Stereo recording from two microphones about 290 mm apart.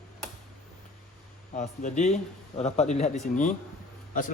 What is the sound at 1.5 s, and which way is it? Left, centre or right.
A man's voice, left.